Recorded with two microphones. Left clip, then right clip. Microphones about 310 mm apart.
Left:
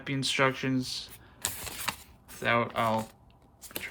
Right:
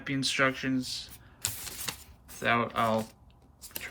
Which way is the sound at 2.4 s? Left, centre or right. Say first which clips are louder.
Even; centre.